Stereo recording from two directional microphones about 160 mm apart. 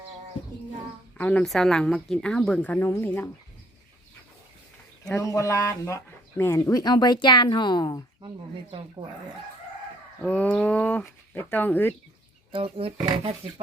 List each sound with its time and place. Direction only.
1.2 s speech: 5° left (ahead or behind)
5.1 s speech: 20° left (ahead or behind)
10.2 s speech: 10° left (ahead or behind)
12.5 s speech: 35° right (ahead or behind)